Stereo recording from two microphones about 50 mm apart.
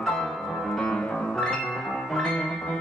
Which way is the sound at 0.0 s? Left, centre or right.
Centre.